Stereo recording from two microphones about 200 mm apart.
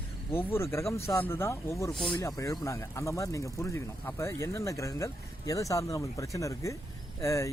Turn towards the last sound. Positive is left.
turn(degrees=15)  # may be behind; listen again after turning